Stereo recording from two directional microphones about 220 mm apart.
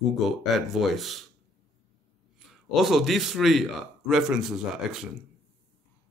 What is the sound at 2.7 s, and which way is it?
A man's voice, centre (ahead or behind).